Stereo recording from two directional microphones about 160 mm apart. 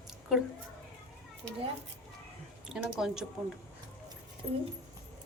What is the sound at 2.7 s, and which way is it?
Speech, 5° right (ahead or behind).